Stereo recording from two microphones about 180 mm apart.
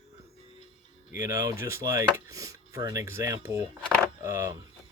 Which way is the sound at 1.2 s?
15° right (ahead or behind).